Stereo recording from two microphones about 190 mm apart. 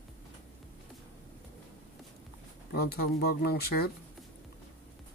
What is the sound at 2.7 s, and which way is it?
A man's voice, 55° left (ahead or behind).